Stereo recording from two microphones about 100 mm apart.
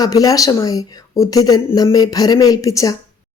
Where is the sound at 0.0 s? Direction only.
35° left (ahead or behind).